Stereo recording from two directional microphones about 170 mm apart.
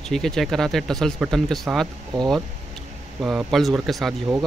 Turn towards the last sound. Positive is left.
turn(degrees=0)  # may be behind; listen again after turning